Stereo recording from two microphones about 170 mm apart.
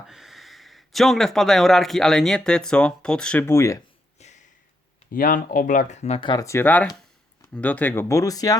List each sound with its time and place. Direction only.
0.1 s speech: centre (ahead or behind); by 3.8 s 20° left (ahead or behind)
4.2 s a sound: 45° left (ahead or behind)
5.1 s speech: 55° left (ahead or behind); by 8.5 s 20° left (ahead or behind)